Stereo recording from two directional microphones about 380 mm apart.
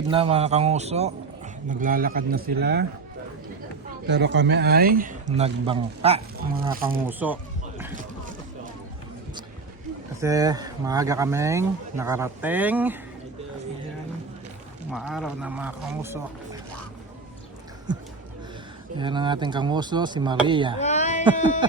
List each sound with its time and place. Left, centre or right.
0.1 s speech: centre
4.0 s speech: right
7.1 s speech: centre
10.2 s speech: centre
14.8 s speech: centre
18.9 s speech: centre
20.7 s a sound: centre
21.6 s speech: centre